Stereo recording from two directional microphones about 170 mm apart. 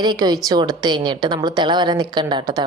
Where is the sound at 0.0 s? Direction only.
25° right (ahead or behind).